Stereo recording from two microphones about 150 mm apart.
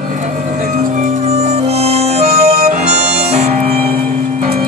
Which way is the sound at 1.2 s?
45° right (ahead or behind).